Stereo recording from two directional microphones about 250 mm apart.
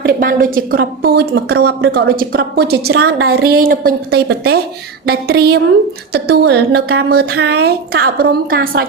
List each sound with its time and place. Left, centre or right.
0.0 s a woman's voice: right